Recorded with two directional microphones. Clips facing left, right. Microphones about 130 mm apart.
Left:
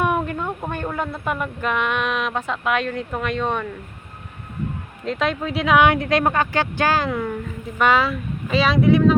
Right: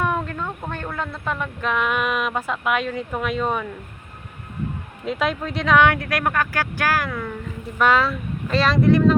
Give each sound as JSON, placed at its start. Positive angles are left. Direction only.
{"t": 0.0, "sound": "a woman's voice", "side_deg": 15}
{"t": 5.0, "sound": "speech", "side_deg": -5}
{"t": 7.8, "sound": "speech", "side_deg": 0}